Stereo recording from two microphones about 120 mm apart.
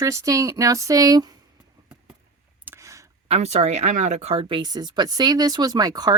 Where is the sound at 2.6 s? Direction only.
25° right (ahead or behind).